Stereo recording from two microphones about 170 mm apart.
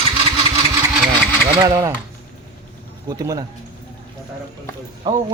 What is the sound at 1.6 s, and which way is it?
Speech, 20° right (ahead or behind).